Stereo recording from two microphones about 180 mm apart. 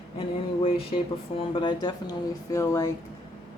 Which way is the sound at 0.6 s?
30° left (ahead or behind).